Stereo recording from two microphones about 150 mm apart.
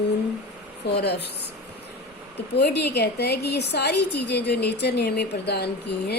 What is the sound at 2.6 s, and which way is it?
Speech, 90° left.